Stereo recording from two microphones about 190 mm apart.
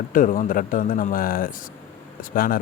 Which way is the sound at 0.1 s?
45° left (ahead or behind).